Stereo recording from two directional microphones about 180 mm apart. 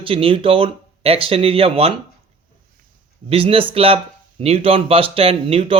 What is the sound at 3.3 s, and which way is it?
Speech, 30° right (ahead or behind).